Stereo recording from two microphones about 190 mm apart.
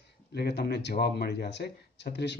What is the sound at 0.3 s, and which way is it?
Speech, 60° left (ahead or behind).